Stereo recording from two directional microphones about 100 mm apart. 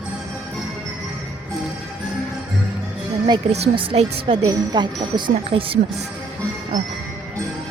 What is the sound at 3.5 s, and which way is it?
Speech, 65° right (ahead or behind).